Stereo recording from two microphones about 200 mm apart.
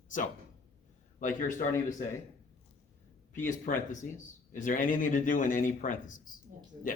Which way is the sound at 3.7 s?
45° left (ahead or behind).